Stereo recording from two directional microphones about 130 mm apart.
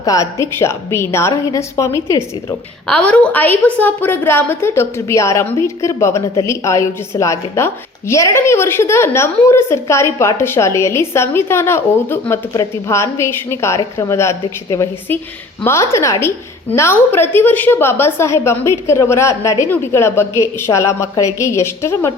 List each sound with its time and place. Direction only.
0.0 s a woman's voice: 25° left (ahead or behind)
2.8 s a woman's voice: 10° left (ahead or behind)